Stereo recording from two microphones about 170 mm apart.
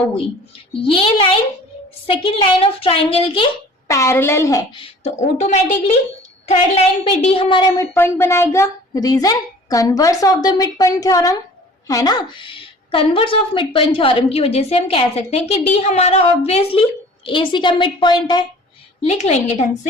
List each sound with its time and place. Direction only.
1.0 s a woman's voice: 30° left (ahead or behind)
3.8 s a woman's voice: 15° left (ahead or behind)
5.0 s a woman's voice: 40° left (ahead or behind)
7.8 s a woman's voice: 15° left (ahead or behind)
19.0 s a woman's voice: 40° left (ahead or behind)